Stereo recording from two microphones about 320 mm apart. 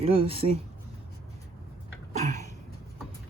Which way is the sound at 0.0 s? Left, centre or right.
Centre.